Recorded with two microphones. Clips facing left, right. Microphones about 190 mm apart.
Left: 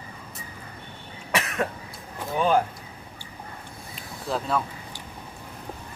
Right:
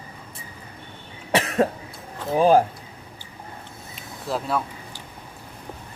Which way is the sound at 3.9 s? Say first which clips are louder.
Right 1 dB; centre (ahead or behind).